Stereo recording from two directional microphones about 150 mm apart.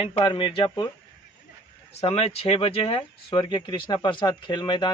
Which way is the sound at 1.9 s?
45° left (ahead or behind).